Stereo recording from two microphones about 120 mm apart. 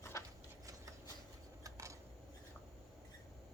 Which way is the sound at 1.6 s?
25° right (ahead or behind).